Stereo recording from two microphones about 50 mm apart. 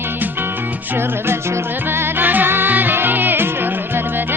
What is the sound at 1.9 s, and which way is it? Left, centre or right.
Music, right.